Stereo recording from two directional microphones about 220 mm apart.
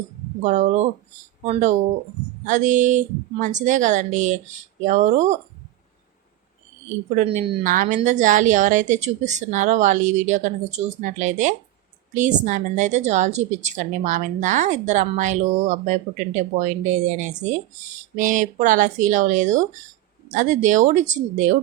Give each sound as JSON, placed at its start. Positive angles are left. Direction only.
{"t": 0.4, "sound": "speech", "side_deg": -35}
{"t": 7.2, "sound": "speech", "side_deg": -35}